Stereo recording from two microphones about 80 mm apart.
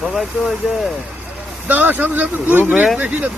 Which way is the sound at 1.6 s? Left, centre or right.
Right.